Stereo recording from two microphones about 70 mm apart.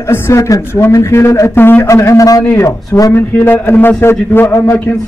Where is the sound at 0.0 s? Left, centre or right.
Left.